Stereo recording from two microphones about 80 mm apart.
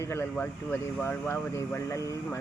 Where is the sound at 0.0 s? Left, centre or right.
Left.